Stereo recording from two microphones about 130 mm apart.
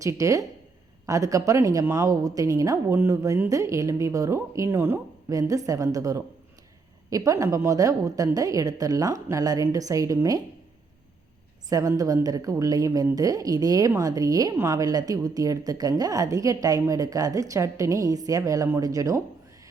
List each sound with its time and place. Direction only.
0.0 s a woman's voice: 25° right (ahead or behind)
11.7 s a woman's voice: 25° right (ahead or behind)